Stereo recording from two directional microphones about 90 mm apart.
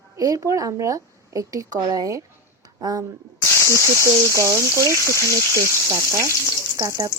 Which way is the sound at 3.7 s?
35° right (ahead or behind).